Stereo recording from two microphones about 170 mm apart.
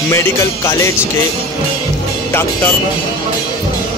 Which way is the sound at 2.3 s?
15° left (ahead or behind).